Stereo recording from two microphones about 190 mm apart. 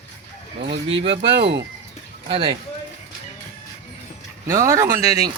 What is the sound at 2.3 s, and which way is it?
Speech, 30° right (ahead or behind).